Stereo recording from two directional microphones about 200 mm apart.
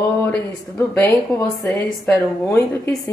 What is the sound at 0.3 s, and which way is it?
Speech, 10° left (ahead or behind).